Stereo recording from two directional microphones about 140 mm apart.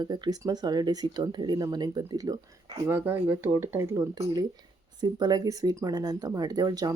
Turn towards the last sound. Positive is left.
turn(degrees=-30)  # may be behind; listen again after turning